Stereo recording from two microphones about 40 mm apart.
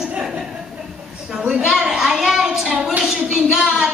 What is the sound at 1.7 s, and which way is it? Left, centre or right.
A child's voice, centre.